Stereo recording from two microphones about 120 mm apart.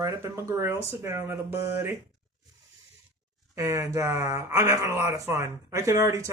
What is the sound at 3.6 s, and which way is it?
Speech, 25° right (ahead or behind).